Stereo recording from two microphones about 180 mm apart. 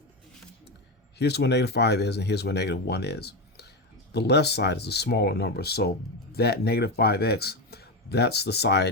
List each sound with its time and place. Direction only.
1.2 s speech: 70° left (ahead or behind)